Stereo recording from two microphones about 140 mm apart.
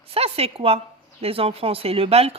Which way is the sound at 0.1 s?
45° right (ahead or behind).